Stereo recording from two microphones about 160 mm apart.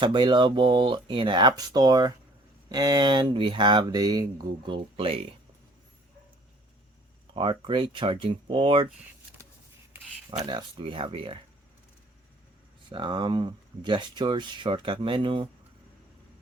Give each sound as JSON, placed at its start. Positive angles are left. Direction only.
{"t": 0.0, "sound": "speech", "side_deg": -30}
{"t": 7.3, "sound": "speech", "side_deg": -30}
{"t": 10.4, "sound": "speech", "side_deg": -25}
{"t": 12.9, "sound": "speech", "side_deg": -30}